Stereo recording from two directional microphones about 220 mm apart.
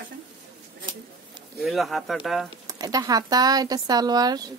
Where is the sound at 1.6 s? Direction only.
Centre (ahead or behind).